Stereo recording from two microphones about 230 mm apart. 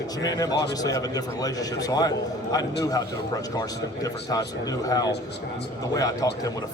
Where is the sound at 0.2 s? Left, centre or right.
Centre.